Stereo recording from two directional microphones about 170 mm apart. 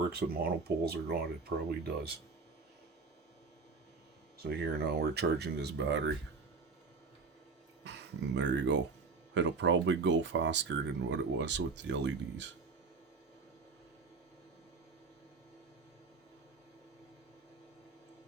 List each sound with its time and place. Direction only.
0.1 s speech: 65° right (ahead or behind)
4.4 s speech: 75° right (ahead or behind)
7.9 s speech: 90° right